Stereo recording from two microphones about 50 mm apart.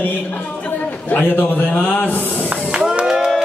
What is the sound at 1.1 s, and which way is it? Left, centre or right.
Speech, left.